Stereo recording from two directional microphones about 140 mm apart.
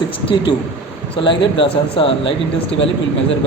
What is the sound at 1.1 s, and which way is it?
A man's voice, 35° left (ahead or behind).